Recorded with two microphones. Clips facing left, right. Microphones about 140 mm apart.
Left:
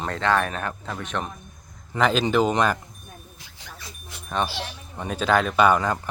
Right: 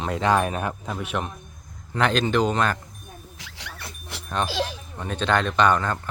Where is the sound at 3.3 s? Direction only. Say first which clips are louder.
Right 3 dB; 85° right; by 4.2 s 65° right (ahead or behind).